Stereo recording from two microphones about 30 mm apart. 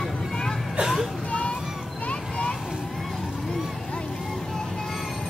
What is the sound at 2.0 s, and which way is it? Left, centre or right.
Vehicle, left.